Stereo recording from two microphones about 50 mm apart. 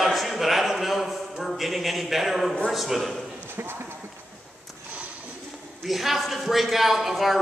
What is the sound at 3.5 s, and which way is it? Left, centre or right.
Clip-clop, right.